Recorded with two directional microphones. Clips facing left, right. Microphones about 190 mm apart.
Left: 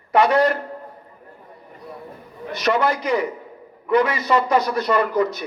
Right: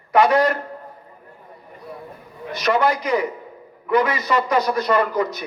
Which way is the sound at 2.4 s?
35° left (ahead or behind).